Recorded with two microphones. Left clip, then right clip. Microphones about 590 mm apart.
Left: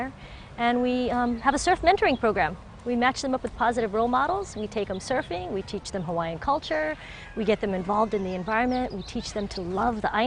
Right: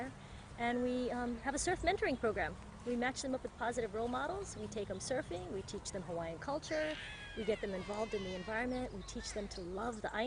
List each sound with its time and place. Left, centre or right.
0.6 s speech: left